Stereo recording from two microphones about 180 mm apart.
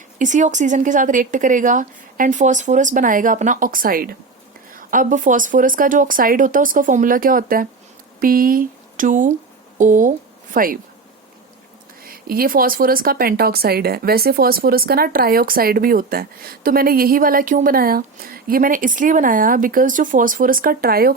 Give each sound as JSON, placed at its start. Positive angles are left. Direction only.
{"t": 0.2, "sound": "speech", "side_deg": -45}
{"t": 12.0, "sound": "speech", "side_deg": -55}